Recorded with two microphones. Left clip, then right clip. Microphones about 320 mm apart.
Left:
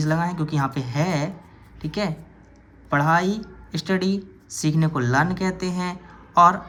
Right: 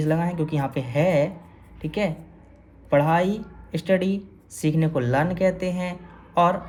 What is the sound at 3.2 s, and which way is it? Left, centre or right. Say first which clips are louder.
Speech: right 1 dB; centre.